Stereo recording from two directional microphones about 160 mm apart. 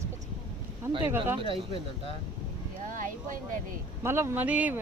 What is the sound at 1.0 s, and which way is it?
Speech, 15° right (ahead or behind).